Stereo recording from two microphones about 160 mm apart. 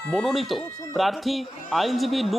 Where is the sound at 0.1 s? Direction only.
Centre (ahead or behind).